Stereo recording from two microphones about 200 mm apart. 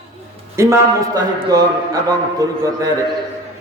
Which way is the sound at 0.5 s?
15° right (ahead or behind).